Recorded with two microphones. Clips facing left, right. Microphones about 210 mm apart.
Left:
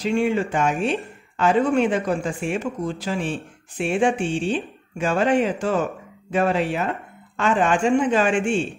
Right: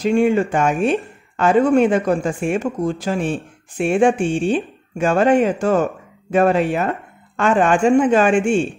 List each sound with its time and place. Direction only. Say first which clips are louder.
0.0 s speech: right 5 dB; 45° right (ahead or behind)